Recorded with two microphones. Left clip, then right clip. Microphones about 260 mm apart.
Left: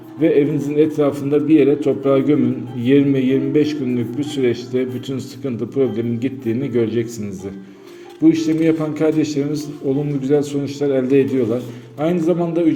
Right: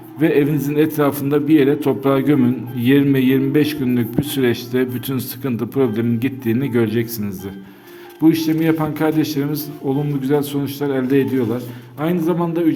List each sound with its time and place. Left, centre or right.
0.2 s a man's voice: right